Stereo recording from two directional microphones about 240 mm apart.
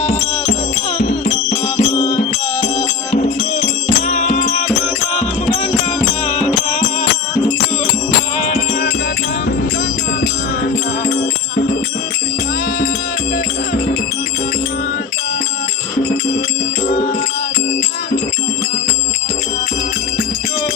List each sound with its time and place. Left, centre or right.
0.9 s music: left
6.2 s music: left
10.6 s music: left